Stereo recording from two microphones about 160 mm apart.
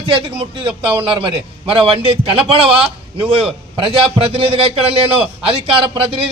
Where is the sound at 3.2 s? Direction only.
35° right (ahead or behind).